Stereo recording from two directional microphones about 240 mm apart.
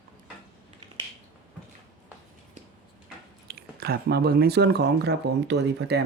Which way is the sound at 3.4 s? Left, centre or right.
Right.